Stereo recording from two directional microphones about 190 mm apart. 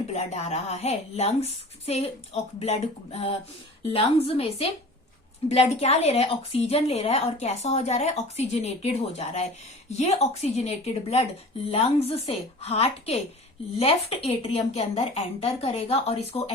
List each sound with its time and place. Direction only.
0.1 s a woman's voice: 35° left (ahead or behind)